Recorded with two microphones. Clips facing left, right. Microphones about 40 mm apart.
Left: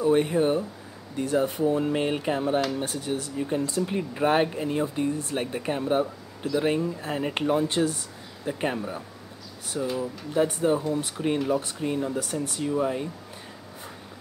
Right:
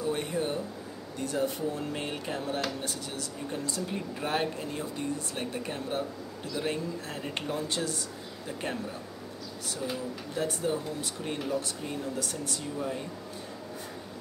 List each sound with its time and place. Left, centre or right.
0.0 s speech: left
9.8 s speech: centre
10.3 s speech: left